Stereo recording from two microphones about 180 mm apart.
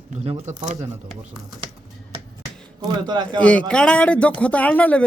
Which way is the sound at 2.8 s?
25° right (ahead or behind).